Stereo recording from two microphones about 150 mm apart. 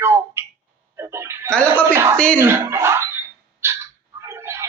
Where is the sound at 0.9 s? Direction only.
15° right (ahead or behind).